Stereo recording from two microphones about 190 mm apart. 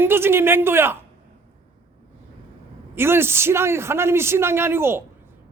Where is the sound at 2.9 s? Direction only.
10° right (ahead or behind).